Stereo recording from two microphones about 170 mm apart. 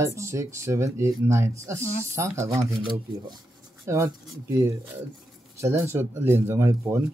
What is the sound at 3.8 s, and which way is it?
Speech, 15° right (ahead or behind).